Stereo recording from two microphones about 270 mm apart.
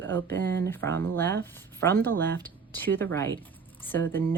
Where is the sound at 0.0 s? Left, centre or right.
Centre.